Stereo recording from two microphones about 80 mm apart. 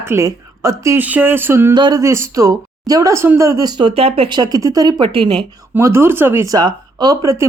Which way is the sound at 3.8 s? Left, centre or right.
Right.